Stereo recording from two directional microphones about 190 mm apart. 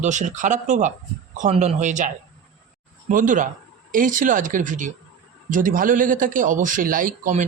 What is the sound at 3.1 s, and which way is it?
A man's voice, 45° right (ahead or behind).